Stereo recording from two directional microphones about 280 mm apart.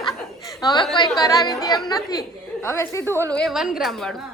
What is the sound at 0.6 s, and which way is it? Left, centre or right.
A woman's voice, centre.